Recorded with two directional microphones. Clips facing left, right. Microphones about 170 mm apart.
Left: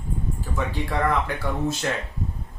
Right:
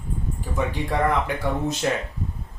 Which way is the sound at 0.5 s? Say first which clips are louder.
Right 2 dB; 20° right (ahead or behind).